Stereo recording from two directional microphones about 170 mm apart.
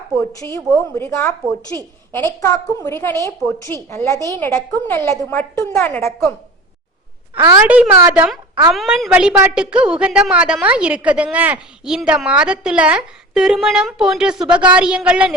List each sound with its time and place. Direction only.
0.5 s a woman's voice: 15° left (ahead or behind)
7.3 s a woman's voice: 15° right (ahead or behind)